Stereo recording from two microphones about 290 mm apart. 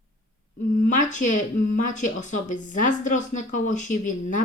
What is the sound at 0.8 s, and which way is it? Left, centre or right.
Speech, left.